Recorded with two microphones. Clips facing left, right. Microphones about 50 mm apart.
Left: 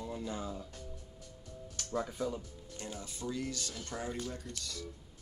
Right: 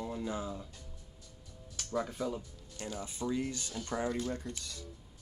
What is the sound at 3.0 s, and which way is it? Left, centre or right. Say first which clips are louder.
Speech: right 5 dB; right.